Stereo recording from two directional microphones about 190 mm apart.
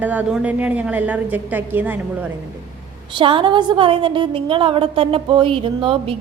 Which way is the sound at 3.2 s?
25° right (ahead or behind).